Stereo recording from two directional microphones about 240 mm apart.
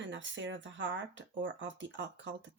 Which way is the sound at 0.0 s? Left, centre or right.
Right.